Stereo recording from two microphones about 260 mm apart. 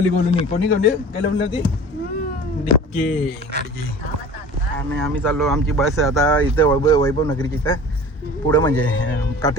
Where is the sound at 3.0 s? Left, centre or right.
Left.